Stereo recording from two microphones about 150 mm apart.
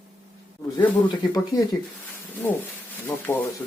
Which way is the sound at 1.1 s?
25° left (ahead or behind).